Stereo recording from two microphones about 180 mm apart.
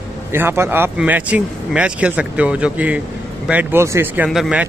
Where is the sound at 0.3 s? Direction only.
15° right (ahead or behind).